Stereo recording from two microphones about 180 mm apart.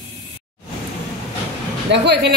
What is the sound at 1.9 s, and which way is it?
Speech, 70° right (ahead or behind).